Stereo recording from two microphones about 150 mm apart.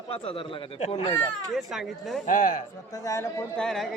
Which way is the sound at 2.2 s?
60° left (ahead or behind).